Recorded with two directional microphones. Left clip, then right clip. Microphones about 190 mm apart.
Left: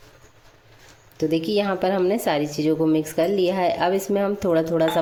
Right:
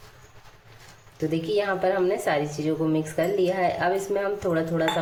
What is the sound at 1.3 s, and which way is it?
A woman's voice, 50° left (ahead or behind).